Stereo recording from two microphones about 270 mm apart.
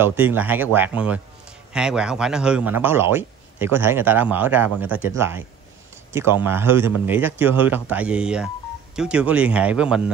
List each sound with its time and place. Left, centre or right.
0.0 s a man's voice: centre